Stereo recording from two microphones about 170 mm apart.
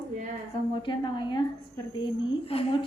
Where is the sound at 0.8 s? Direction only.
30° left (ahead or behind).